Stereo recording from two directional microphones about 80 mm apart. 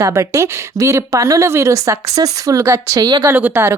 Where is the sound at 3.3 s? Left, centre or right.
Right.